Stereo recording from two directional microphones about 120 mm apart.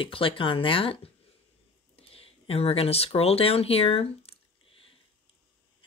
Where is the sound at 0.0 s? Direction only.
50° left (ahead or behind).